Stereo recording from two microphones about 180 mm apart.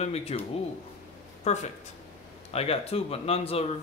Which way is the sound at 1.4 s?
40° left (ahead or behind).